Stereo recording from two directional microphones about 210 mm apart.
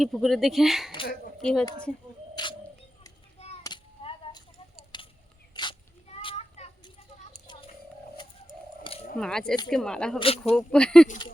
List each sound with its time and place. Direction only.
0.0 s a woman's voice: centre (ahead or behind)
2.3 s a sound: 20° left (ahead or behind)
3.3 s children playing: 30° left (ahead or behind)
3.6 s a sound: 20° left (ahead or behind)
9.1 s speech: 5° left (ahead or behind)
10.2 s speech: 25° left (ahead or behind)
10.7 s speech: 5° left (ahead or behind)